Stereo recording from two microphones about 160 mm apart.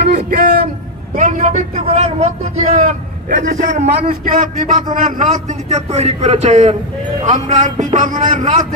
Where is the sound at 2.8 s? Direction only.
55° right (ahead or behind).